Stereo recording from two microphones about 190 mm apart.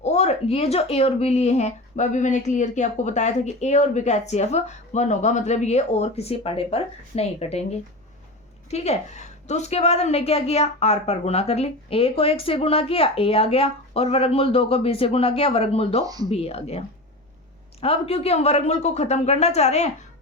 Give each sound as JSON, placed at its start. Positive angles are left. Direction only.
{"t": 0.0, "sound": "speech", "side_deg": 35}
{"t": 16.0, "sound": "speech", "side_deg": -20}
{"t": 16.3, "sound": "speech", "side_deg": 30}